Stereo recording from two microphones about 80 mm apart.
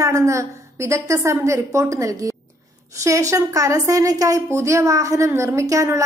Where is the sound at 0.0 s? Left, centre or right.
Right.